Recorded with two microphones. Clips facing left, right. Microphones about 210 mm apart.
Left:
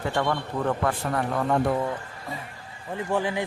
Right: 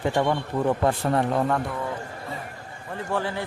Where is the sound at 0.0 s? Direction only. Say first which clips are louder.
Right 3 dB; 15° right (ahead or behind).